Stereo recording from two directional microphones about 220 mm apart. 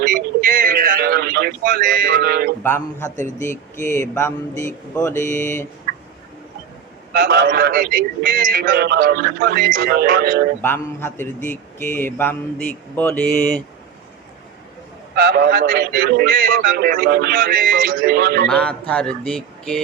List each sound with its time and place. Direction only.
0.4 s music: 40° right (ahead or behind)
3.2 s speech: 35° left (ahead or behind)
3.9 s speech: 10° left (ahead or behind)
7.1 s a man's voice: 45° right (ahead or behind)
10.6 s speech: 10° left (ahead or behind)
15.1 s a man's voice: 45° right (ahead or behind)
18.4 s speech: 5° left (ahead or behind)